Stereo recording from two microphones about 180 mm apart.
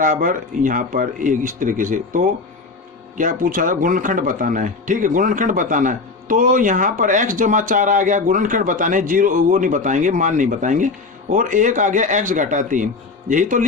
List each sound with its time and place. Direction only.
0.0 s speech: 45° right (ahead or behind)